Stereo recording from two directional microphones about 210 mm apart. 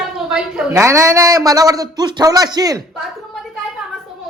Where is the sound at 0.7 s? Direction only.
15° right (ahead or behind).